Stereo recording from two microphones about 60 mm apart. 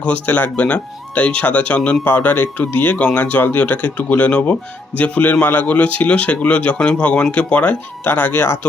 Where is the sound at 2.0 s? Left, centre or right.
Left.